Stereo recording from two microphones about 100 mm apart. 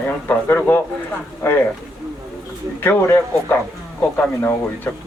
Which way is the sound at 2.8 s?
20° left (ahead or behind).